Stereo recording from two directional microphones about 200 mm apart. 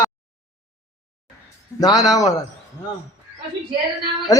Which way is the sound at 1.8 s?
20° left (ahead or behind).